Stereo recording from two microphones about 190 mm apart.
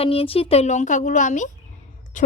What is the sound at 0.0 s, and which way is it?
A woman's voice, 30° left (ahead or behind).